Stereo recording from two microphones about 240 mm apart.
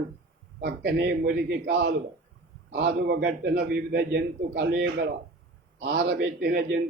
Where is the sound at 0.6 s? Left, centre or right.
Right.